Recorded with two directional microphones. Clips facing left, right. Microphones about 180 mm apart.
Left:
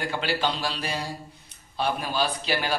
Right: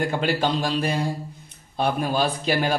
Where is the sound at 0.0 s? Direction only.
50° right (ahead or behind).